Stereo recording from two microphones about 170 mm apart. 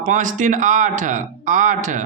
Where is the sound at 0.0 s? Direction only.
50° right (ahead or behind).